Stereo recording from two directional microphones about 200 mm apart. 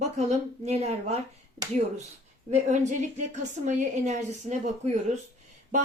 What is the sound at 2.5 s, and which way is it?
A woman's voice, 35° right (ahead or behind).